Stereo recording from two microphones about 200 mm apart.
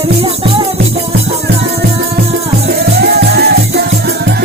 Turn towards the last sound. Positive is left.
turn(degrees=-55)  # may be behind; listen again after turning